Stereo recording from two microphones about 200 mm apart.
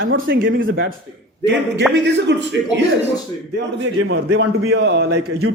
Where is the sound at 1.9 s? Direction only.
60° right (ahead or behind).